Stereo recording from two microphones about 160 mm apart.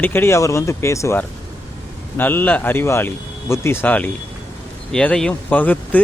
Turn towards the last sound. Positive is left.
turn(degrees=10)  # may be behind; listen again after turning